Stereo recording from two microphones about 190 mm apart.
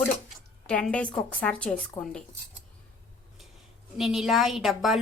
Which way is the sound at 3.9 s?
Centre (ahead or behind).